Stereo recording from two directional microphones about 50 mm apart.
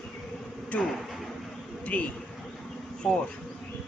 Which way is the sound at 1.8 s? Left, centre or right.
Left.